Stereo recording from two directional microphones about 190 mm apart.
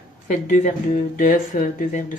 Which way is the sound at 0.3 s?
45° left (ahead or behind).